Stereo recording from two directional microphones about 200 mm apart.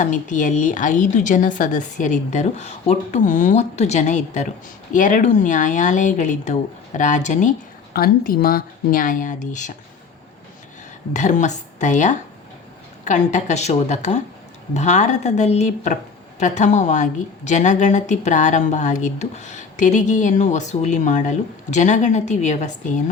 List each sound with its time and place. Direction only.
0.0 s a woman's voice: 40° left (ahead or behind)
11.1 s a woman's voice: 35° left (ahead or behind)